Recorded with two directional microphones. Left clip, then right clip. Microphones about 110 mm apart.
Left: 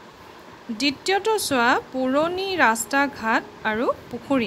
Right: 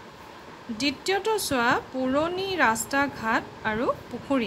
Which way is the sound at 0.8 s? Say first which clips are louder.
Left 4 dB; 45° left (ahead or behind).